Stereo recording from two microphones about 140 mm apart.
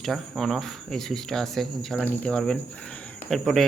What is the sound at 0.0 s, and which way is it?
Speech, centre (ahead or behind).